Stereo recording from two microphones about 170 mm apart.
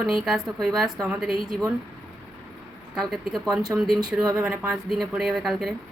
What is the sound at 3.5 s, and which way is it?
Speech, 20° right (ahead or behind).